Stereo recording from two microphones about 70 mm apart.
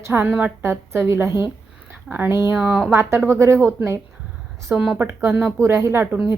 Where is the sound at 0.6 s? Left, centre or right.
Right.